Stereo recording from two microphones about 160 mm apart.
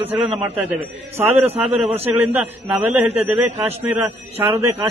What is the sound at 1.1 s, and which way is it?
Speech, 15° right (ahead or behind).